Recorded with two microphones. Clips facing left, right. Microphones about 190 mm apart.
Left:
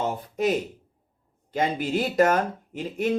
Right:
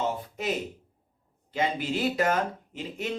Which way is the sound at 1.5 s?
50° left (ahead or behind).